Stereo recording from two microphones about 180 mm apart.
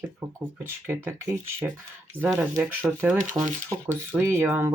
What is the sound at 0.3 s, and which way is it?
Speech, 15° right (ahead or behind).